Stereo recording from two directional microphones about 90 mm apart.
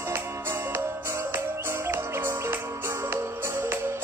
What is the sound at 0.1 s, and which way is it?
Music, 30° right (ahead or behind).